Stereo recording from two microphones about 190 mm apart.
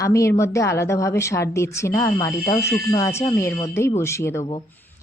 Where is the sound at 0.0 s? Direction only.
15° left (ahead or behind).